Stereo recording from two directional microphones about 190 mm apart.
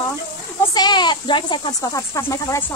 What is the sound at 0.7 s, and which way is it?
Speech, 20° left (ahead or behind).